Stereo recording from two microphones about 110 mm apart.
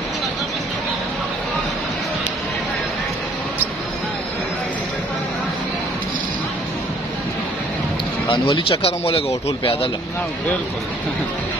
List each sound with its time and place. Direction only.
8.3 s speech: 50° left (ahead or behind)